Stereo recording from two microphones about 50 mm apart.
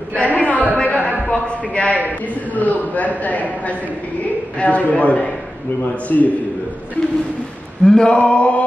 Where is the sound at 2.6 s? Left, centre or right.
Left.